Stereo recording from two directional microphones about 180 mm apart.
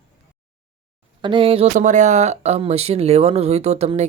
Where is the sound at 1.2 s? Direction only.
30° right (ahead or behind).